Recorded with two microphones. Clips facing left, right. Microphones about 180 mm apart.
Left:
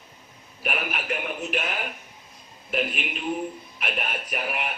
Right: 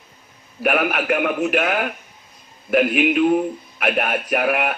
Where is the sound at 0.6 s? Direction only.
65° right (ahead or behind).